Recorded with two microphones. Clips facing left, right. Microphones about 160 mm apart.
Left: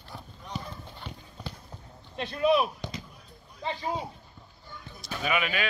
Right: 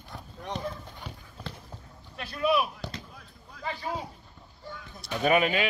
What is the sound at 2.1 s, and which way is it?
Speech, 25° left (ahead or behind).